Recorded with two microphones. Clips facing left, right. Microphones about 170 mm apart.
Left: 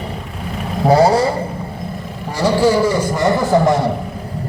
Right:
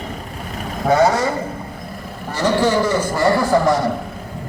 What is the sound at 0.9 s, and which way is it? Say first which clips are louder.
Speech: left 3 dB; 35° left (ahead or behind).